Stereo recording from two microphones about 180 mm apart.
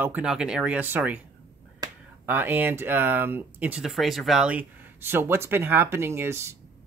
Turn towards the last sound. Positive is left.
turn(degrees=-15)  # may be behind; listen again after turning